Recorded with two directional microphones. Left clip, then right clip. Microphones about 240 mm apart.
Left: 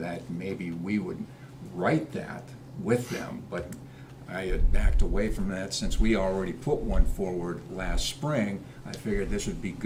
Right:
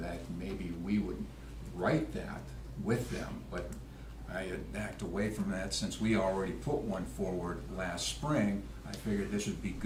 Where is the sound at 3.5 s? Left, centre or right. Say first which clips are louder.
Left 7 dB; centre.